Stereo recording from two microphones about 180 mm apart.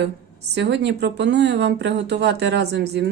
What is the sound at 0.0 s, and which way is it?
A woman's voice, 70° right (ahead or behind).